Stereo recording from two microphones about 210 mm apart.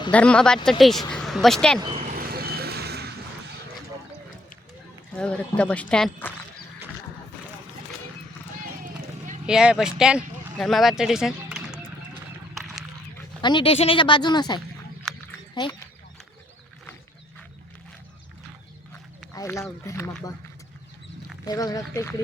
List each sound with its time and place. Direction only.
0.1 s speech: 5° left (ahead or behind)
1.8 s vehicle: 25° right (ahead or behind)
2.1 s vehicle: 45° right (ahead or behind)
5.1 s speech: 5° left (ahead or behind)
8.8 s run: 35° right (ahead or behind)
9.5 s speech: 5° right (ahead or behind)
12.5 s a sound: centre (ahead or behind)
13.4 s speech: 25° left (ahead or behind)
19.3 s speech: 15° left (ahead or behind)
21.4 s speech: 15° left (ahead or behind)